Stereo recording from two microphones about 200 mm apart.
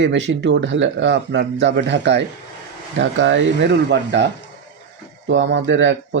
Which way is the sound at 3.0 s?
70° right (ahead or behind).